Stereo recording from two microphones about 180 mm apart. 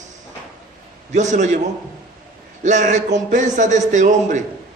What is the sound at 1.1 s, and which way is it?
Speech, 40° right (ahead or behind).